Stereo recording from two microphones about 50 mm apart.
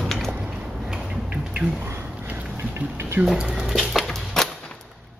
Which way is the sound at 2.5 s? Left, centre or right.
Right.